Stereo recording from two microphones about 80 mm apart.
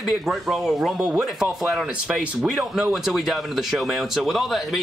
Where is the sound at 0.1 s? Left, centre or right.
Centre.